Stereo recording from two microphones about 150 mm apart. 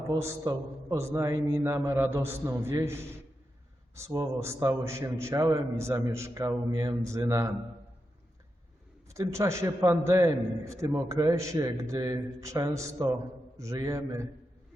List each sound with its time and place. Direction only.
0.1 s a man's voice: 20° right (ahead or behind)
9.0 s a man's voice: 20° right (ahead or behind)